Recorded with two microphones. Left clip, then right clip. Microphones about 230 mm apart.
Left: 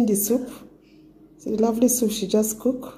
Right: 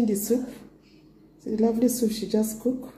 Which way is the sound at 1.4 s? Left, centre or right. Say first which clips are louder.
Left 3 dB; left.